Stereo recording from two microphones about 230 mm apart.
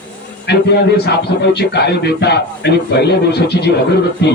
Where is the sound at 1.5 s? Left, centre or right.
Left.